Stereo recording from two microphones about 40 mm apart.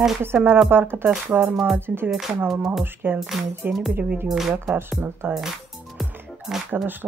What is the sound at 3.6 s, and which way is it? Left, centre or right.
Music, right.